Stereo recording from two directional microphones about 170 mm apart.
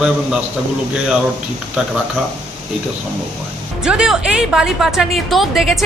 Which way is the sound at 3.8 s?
5° right (ahead or behind).